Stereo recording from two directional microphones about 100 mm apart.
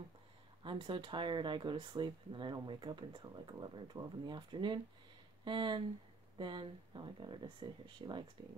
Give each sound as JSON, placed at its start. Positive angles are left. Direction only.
{"t": 0.7, "sound": "speech", "side_deg": -55}